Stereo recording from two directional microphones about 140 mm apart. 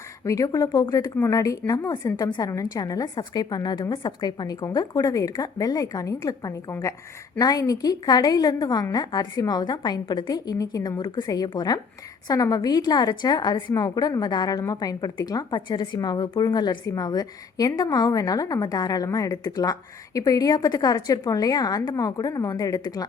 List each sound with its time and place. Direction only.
0.3 s a woman's voice: 25° left (ahead or behind)